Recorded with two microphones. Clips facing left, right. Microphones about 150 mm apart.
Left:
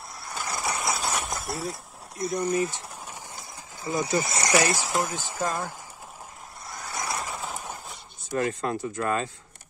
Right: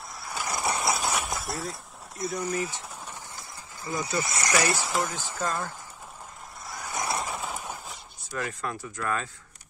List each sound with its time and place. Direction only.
0.2 s vehicle: 10° right (ahead or behind); by 0.9 s 25° right (ahead or behind)
1.1 s a sound: centre (ahead or behind)
3.8 s speech: 25° left (ahead or behind)
4.7 s speech: 5° left (ahead or behind)
6.9 s vehicle: 20° right (ahead or behind)
8.4 s speech: 30° left (ahead or behind)